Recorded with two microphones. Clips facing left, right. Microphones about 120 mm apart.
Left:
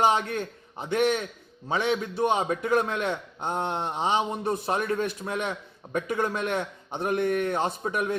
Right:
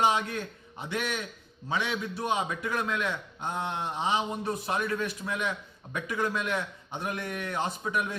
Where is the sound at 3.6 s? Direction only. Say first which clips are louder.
Left 3 dB; 30° left (ahead or behind).